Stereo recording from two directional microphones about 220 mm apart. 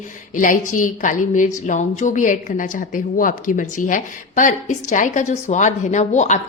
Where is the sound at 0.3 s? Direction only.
35° left (ahead or behind).